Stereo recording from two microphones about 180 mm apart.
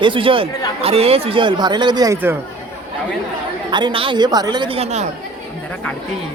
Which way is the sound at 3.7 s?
25° right (ahead or behind).